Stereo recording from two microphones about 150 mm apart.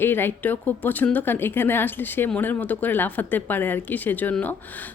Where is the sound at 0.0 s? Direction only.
15° left (ahead or behind).